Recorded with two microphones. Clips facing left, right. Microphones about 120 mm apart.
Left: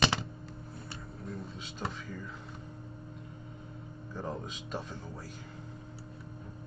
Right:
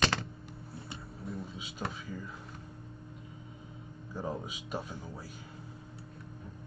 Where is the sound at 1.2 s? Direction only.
Centre (ahead or behind).